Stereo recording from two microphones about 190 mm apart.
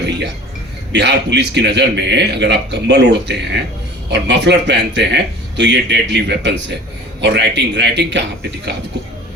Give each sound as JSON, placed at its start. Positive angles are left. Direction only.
{"t": 0.9, "sound": "a man's voice", "side_deg": -65}